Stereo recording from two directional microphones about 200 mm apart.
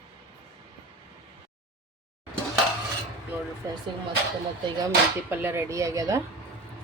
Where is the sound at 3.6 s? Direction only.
15° right (ahead or behind).